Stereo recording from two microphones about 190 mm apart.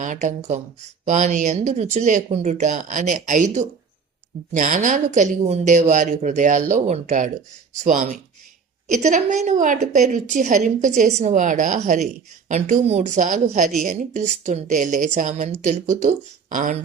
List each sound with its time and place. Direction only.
0.0 s a woman's voice: 40° right (ahead or behind)